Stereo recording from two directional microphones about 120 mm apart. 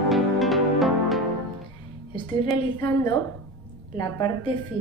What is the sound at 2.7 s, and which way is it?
A woman's voice, 40° left (ahead or behind).